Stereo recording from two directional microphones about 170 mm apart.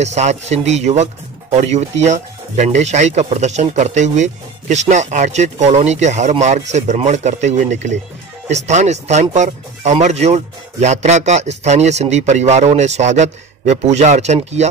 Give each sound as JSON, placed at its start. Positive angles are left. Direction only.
{"t": 0.0, "sound": "speech", "side_deg": -40}